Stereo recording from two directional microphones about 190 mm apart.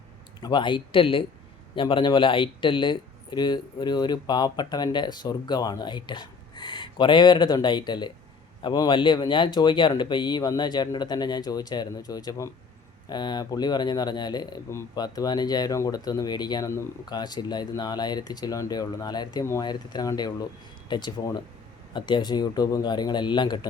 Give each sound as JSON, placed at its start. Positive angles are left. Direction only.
{"t": 0.4, "sound": "speech", "side_deg": 25}